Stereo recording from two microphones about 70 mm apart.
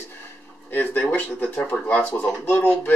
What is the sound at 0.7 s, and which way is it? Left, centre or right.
Speech, left.